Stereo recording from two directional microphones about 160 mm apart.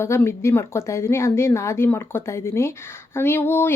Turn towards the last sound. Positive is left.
turn(degrees=15)  # may be behind; listen again after turning